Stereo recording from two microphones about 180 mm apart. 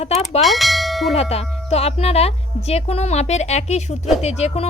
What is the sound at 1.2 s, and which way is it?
Speech, 35° left (ahead or behind).